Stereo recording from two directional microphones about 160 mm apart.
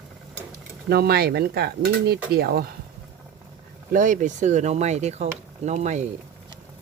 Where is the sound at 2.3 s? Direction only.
75° right (ahead or behind).